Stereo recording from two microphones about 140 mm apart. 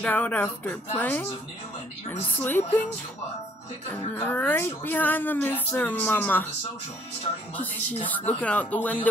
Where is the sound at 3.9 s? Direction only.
15° left (ahead or behind).